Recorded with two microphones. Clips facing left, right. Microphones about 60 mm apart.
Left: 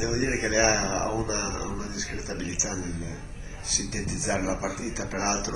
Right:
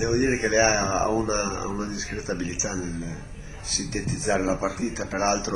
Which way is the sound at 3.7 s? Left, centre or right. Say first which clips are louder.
Right 3 dB; right.